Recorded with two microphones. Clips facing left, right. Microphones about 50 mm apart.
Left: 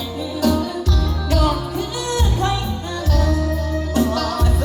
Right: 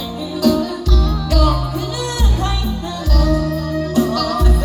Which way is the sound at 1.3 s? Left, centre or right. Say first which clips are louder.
Right 1 dB; left.